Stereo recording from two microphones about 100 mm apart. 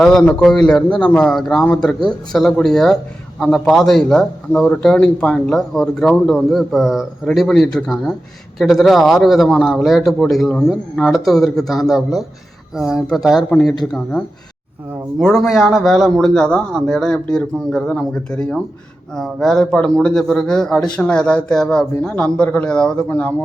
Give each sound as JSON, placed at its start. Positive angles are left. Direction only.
{"t": 0.0, "sound": "a man's voice", "side_deg": 10}
{"t": 15.2, "sound": "a man's voice", "side_deg": -5}